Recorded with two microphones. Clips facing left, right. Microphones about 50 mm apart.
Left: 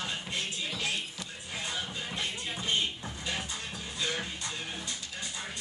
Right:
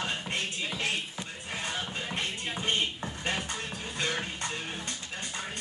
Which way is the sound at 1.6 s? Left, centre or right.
Right.